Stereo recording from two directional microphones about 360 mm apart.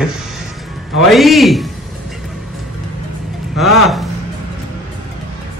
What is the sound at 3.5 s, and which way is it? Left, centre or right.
Speech, centre.